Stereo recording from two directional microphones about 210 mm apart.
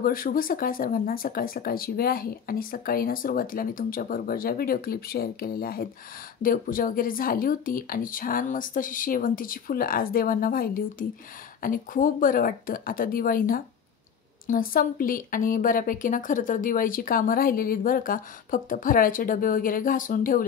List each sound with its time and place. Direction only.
0.0 s speech: 40° left (ahead or behind)